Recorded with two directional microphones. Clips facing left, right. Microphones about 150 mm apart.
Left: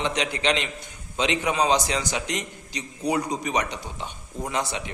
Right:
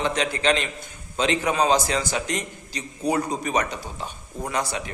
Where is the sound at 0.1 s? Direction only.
20° left (ahead or behind).